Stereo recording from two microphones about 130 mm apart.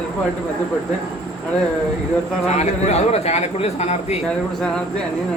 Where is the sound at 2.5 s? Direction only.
60° left (ahead or behind).